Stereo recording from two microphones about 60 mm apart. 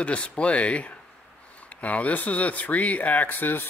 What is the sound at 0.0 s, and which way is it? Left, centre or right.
Speech, centre.